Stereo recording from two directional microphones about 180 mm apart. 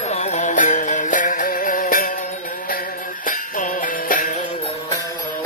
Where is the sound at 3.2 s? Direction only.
50° left (ahead or behind).